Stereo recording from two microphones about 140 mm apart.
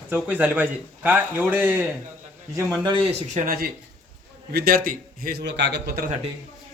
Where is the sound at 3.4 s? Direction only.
90° right.